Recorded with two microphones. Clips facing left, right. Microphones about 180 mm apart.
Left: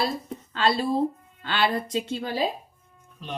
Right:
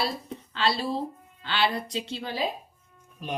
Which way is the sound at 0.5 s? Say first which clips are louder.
Left 4 dB; 50° left (ahead or behind).